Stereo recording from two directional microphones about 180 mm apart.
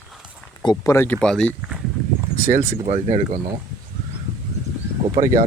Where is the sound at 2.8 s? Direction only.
40° right (ahead or behind).